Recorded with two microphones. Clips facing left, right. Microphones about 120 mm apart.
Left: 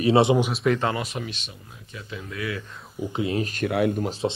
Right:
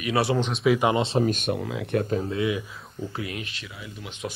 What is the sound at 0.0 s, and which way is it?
Speech, 25° left (ahead or behind).